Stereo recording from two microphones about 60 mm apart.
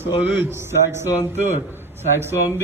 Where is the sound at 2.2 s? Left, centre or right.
Right.